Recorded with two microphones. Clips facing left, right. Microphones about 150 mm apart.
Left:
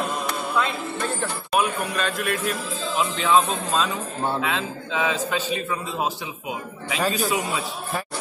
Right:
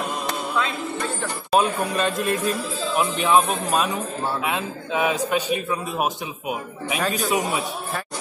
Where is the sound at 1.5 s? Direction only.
25° right (ahead or behind).